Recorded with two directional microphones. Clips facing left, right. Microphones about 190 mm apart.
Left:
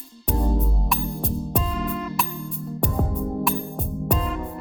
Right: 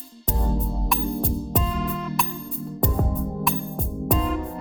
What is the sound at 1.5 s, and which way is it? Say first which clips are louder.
Music: even; centre (ahead or behind).